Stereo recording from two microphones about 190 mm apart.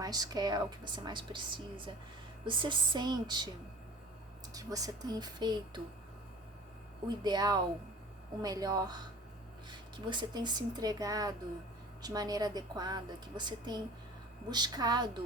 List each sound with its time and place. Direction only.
0.0 s a woman's voice: 20° right (ahead or behind)
4.5 s a woman's voice: 20° right (ahead or behind)
7.3 s a woman's voice: 20° right (ahead or behind)